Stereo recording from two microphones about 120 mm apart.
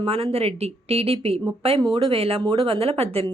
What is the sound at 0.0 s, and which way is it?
Speech, 55° right (ahead or behind).